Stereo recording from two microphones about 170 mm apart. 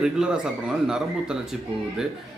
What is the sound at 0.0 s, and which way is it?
A man's voice, 5° right (ahead or behind).